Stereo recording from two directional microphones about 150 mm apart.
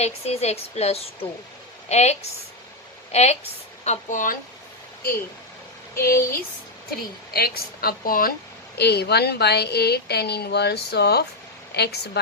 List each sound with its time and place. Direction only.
0.0 s a woman's voice: 45° left (ahead or behind)
6.0 s a woman's voice: 85° left
8.8 s a woman's voice: 90° left